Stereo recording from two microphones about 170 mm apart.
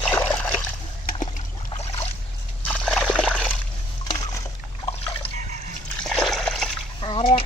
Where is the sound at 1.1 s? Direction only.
45° left (ahead or behind).